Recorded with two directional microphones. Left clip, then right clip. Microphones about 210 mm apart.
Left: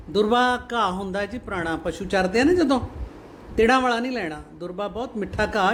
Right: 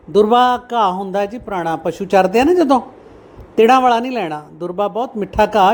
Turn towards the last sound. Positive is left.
turn(degrees=-20)  # may be behind; listen again after turning